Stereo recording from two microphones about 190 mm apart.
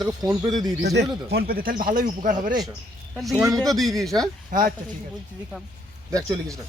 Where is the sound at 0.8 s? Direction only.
60° right (ahead or behind).